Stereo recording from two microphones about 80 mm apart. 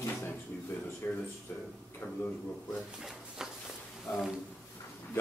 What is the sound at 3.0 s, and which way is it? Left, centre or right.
Drawer open or close, centre.